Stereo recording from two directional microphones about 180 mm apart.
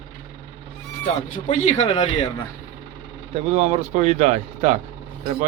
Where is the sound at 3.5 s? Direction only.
35° right (ahead or behind).